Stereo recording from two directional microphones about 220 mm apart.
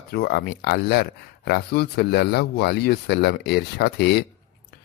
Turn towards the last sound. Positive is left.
turn(degrees=50)  # may be behind; listen again after turning